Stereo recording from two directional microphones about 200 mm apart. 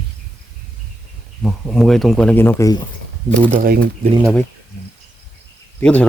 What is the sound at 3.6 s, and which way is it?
Speech, 50° right (ahead or behind).